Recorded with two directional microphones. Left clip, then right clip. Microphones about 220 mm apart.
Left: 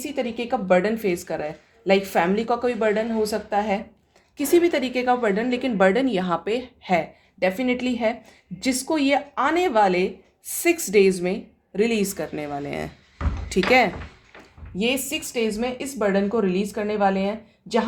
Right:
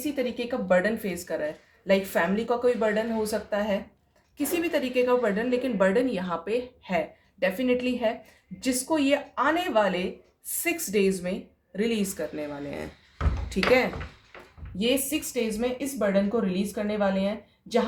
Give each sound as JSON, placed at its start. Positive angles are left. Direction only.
{"t": 0.2, "sound": "a woman's voice", "side_deg": 40}